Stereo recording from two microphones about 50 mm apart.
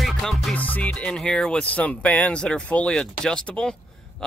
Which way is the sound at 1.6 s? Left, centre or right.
Left.